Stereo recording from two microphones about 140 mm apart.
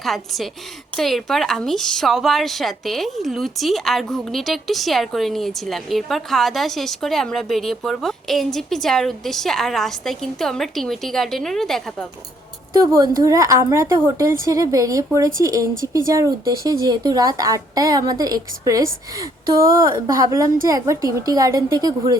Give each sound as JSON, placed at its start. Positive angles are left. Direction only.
{"t": 0.0, "sound": "a woman's voice", "side_deg": 0}
{"t": 12.7, "sound": "a woman's voice", "side_deg": -25}